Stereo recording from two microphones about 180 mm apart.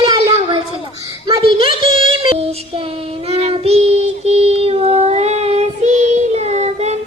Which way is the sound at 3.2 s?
35° right (ahead or behind).